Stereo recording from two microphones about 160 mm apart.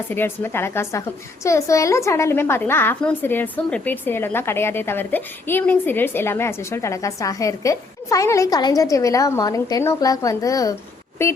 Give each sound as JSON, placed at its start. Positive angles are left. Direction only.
{"t": 0.1, "sound": "a woman's voice", "side_deg": 15}